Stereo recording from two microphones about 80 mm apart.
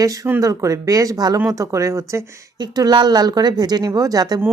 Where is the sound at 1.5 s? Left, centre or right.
Right.